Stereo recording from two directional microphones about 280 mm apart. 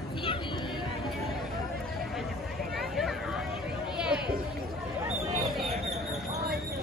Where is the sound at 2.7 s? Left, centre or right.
Centre.